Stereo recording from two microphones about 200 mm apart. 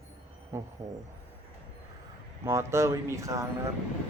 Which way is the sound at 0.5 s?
15° right (ahead or behind).